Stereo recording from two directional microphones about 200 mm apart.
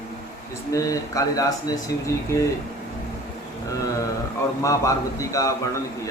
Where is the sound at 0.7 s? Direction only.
15° left (ahead or behind).